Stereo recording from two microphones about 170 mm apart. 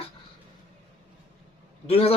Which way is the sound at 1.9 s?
35° left (ahead or behind).